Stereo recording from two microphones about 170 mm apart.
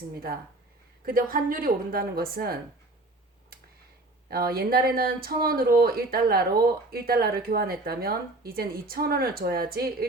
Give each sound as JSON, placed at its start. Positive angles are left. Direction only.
{"t": 1.0, "sound": "speech", "side_deg": -55}
{"t": 4.3, "sound": "speech", "side_deg": -60}